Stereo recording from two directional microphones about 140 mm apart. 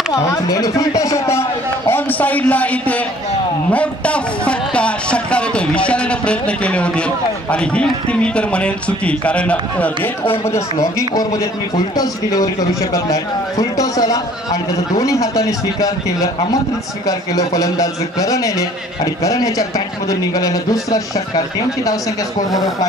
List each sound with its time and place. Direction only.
0.1 s speech: 25° left (ahead or behind)
1.9 s a sound: 15° left (ahead or behind)
3.7 s music: 10° left (ahead or behind)
7.5 s a man's voice: 10° left (ahead or behind)
10.5 s a man's voice: 25° left (ahead or behind)
17.4 s a man's voice: 25° left (ahead or behind)